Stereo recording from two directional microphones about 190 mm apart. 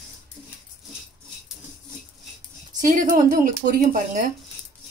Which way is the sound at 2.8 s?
45° right (ahead or behind).